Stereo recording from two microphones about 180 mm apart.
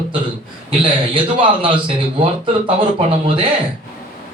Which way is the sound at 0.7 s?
30° right (ahead or behind).